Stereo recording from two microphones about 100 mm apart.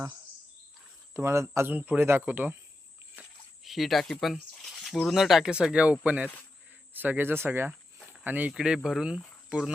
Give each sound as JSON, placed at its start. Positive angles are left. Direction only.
{"t": 1.1, "sound": "speech", "side_deg": -30}
{"t": 3.6, "sound": "speech", "side_deg": 0}
{"t": 7.7, "sound": "cricket", "side_deg": 0}
{"t": 8.2, "sound": "speech", "side_deg": -15}